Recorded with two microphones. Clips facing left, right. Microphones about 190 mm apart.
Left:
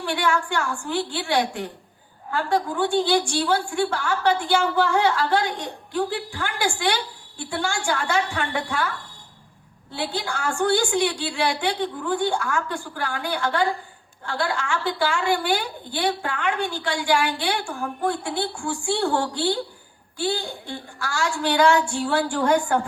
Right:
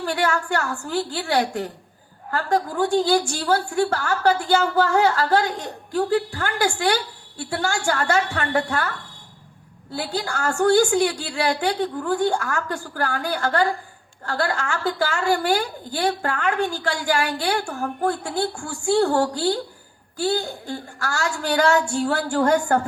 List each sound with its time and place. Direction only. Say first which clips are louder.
0.0 s a woman's voice: right 1 dB; 40° right (ahead or behind)
9.9 s a woman's voice: right 1 dB; 40° right (ahead or behind)